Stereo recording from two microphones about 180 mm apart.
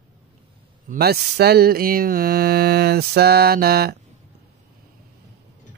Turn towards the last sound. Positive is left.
turn(degrees=-60)  # may be behind; listen again after turning